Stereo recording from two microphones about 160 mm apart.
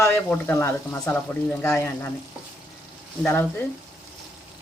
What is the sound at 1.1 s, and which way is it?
Frying, 10° left (ahead or behind).